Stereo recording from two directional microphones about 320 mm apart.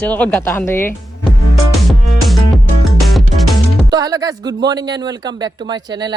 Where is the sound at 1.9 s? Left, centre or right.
Centre.